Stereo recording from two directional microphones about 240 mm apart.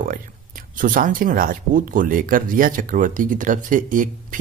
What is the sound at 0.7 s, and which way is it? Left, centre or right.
Speech, right.